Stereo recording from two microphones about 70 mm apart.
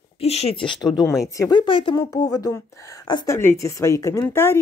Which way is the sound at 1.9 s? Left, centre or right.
Left.